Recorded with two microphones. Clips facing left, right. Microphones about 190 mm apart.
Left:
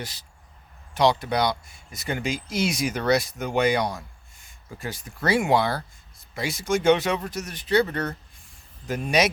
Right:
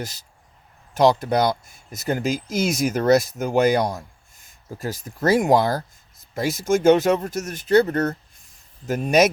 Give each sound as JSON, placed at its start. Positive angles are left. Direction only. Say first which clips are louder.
{"t": 0.9, "sound": "speech", "louder": "right 4 dB", "side_deg": -45}